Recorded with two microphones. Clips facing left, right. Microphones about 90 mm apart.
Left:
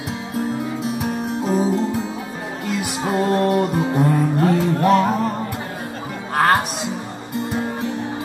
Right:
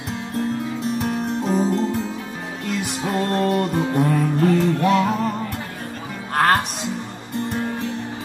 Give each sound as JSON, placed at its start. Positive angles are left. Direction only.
{"t": 0.4, "sound": "music", "side_deg": 5}
{"t": 4.7, "sound": "music", "side_deg": 40}
{"t": 6.3, "sound": "music", "side_deg": 0}